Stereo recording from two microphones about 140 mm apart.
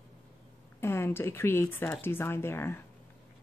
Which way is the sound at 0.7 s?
15° left (ahead or behind).